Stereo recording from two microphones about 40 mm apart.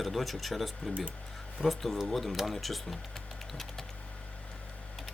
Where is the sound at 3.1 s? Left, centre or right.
Centre.